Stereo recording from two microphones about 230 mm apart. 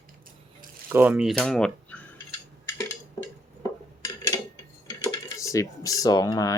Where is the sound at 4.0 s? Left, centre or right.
Centre.